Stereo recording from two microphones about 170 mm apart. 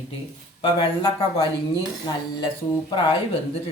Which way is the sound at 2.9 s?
30° left (ahead or behind).